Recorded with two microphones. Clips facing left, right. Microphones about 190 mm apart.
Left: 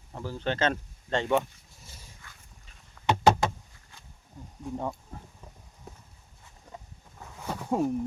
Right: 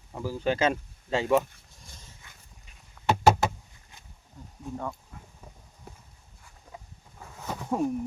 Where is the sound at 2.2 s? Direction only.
20° right (ahead or behind).